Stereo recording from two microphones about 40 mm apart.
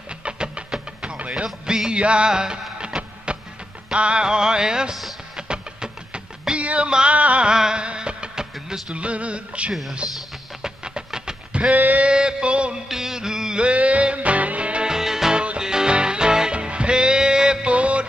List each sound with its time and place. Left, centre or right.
0.2 s music: right
6.5 s music: right
7.1 s a sound: right
7.4 s music: centre
8.9 s music: right
11.1 s a sound: centre
11.7 s a sound: right
12.1 s music: right
12.8 s music: centre; by 14.9 s right
14.9 s music: centre
15.3 s music: right